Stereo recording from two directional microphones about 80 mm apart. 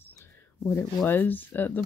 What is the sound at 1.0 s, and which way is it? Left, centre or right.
Speech, left.